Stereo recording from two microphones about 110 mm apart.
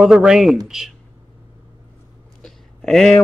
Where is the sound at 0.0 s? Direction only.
5° right (ahead or behind).